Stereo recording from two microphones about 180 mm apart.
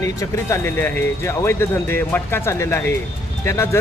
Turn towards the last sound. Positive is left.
turn(degrees=15)  # may be behind; listen again after turning